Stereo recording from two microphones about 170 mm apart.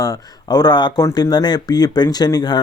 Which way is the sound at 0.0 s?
20° left (ahead or behind).